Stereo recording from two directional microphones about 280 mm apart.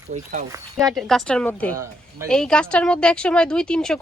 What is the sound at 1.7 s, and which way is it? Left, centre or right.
Speech, centre.